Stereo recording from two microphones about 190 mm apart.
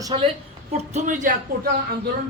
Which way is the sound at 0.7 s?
35° right (ahead or behind).